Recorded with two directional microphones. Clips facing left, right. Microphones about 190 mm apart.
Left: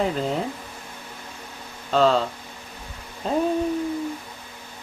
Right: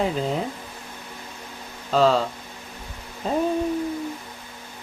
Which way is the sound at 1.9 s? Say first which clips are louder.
Even; centre (ahead or behind).